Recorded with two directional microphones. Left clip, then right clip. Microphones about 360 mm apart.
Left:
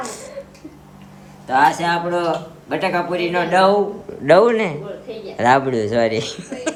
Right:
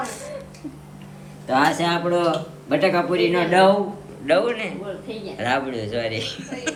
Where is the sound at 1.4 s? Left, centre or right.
Centre.